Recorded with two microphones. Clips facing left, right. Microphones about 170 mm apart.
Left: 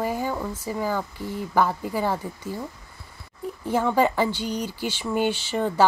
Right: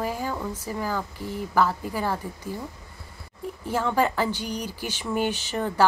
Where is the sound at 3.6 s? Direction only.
15° left (ahead or behind).